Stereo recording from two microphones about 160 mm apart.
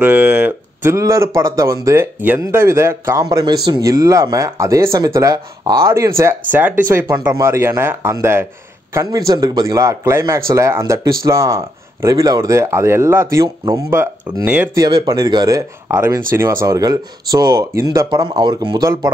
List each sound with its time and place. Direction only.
0.0 s speech: 10° right (ahead or behind)
14.8 s speech: 25° right (ahead or behind)